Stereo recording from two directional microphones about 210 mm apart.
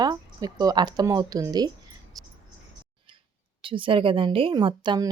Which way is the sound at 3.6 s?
25° right (ahead or behind).